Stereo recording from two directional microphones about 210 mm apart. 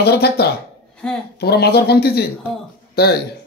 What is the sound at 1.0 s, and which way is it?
Speech, 5° left (ahead or behind).